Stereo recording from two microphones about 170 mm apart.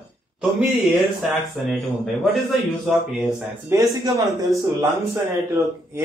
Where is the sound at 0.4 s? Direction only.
Centre (ahead or behind).